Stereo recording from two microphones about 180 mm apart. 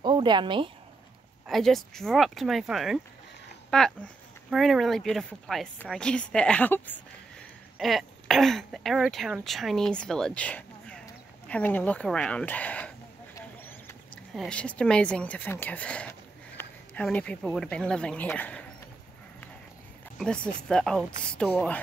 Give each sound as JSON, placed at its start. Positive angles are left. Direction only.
{"t": 0.0, "sound": "speech", "side_deg": -25}
{"t": 1.5, "sound": "speech", "side_deg": 0}
{"t": 11.4, "sound": "a sound", "side_deg": 10}
{"t": 14.3, "sound": "speech", "side_deg": 5}
{"t": 20.2, "sound": "speech", "side_deg": 5}